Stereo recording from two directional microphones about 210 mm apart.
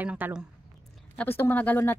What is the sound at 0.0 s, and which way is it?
Speech, 5° right (ahead or behind).